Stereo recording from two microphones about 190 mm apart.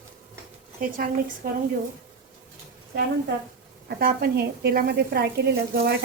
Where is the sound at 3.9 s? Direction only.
55° right (ahead or behind).